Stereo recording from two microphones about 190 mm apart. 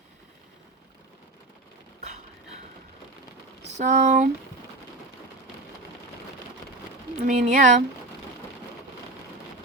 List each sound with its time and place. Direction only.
3.8 s speech: 40° right (ahead or behind)
7.3 s speech: 40° right (ahead or behind)